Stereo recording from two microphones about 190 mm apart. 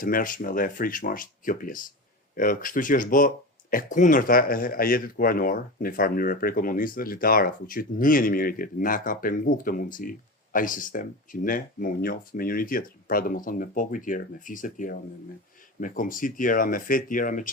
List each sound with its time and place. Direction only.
0.0 s speech: 45° left (ahead or behind)